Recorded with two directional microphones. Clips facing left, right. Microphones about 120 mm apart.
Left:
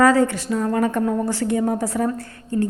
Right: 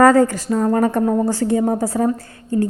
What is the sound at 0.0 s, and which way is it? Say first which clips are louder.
A woman's voice: right 4 dB; 45° right (ahead or behind).